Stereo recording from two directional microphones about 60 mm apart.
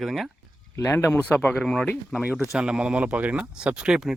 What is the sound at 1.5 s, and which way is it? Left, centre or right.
Speech, centre.